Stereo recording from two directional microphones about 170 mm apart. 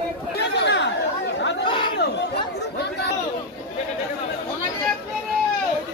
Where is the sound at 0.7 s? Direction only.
90° left.